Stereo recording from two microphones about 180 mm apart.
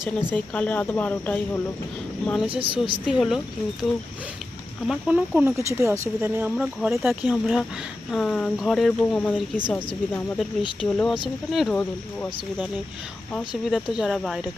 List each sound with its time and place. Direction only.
0.2 s speech: 10° left (ahead or behind)
2.5 s a woman's voice: 30° right (ahead or behind)
3.1 s speech: centre (ahead or behind)
4.9 s speech: 5° right (ahead or behind)
13.7 s speech: centre (ahead or behind)